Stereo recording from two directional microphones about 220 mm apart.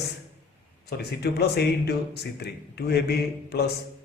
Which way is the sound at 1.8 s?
50° left (ahead or behind).